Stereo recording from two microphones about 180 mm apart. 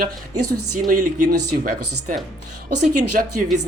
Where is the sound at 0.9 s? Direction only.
50° right (ahead or behind).